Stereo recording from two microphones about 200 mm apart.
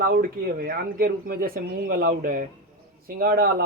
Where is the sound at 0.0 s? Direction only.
45° right (ahead or behind).